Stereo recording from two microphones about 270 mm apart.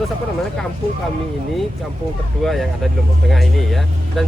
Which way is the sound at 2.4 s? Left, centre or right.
Centre.